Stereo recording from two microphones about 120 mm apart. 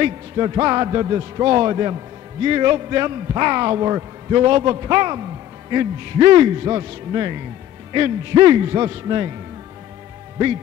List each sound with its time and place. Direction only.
0.0 s a man's voice: 35° right (ahead or behind)